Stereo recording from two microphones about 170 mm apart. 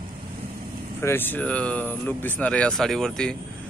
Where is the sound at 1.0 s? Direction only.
10° left (ahead or behind).